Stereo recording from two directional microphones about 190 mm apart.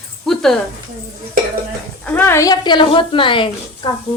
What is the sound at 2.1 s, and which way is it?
Speech, 10° left (ahead or behind).